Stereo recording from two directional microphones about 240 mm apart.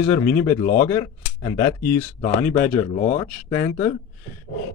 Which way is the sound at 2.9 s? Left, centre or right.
Left.